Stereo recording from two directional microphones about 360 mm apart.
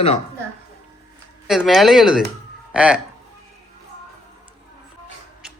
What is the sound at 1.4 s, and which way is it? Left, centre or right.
Speech, centre.